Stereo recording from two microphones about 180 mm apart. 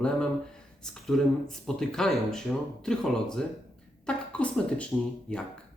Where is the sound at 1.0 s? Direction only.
Centre (ahead or behind).